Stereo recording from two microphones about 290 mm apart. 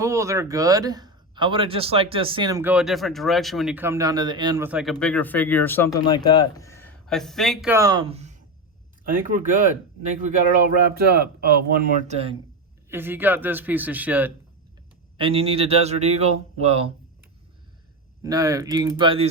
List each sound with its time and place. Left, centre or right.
0.0 s a man's voice: centre; by 9.6 s right
10.8 s speech: right
12.9 s a man's voice: centre
15.2 s speech: centre
18.2 s a man's voice: centre